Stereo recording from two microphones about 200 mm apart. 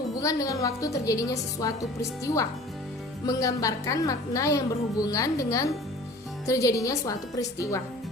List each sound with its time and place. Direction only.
0.2 s a woman's voice: 15° left (ahead or behind)